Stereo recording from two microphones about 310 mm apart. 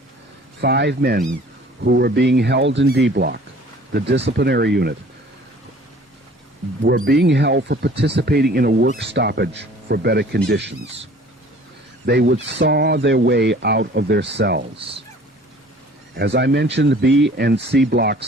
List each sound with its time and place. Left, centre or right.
0.6 s speech: right
6.8 s speech: right
12.0 s speech: right
16.1 s speech: right